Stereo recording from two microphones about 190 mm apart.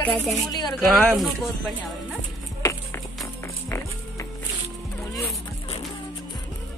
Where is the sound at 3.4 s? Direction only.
15° left (ahead or behind).